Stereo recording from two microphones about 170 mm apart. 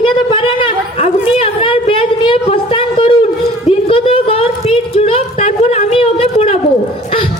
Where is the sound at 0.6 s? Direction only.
35° left (ahead or behind).